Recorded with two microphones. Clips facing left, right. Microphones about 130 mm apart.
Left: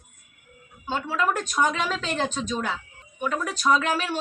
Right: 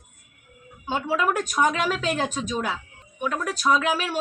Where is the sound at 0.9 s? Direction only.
15° right (ahead or behind).